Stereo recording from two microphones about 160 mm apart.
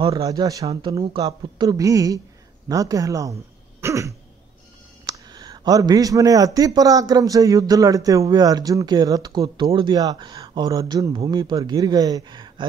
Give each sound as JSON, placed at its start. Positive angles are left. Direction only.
{"t": 0.0, "sound": "speech", "side_deg": -25}
{"t": 3.8, "sound": "throat clearing", "side_deg": -20}
{"t": 5.0, "sound": "speech", "side_deg": -25}